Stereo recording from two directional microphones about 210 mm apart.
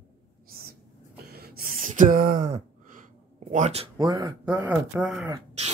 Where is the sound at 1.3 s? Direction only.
50° right (ahead or behind); by 4.3 s 20° right (ahead or behind).